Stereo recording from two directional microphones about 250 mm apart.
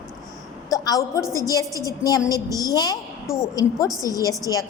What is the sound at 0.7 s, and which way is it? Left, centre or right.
A woman's voice, centre.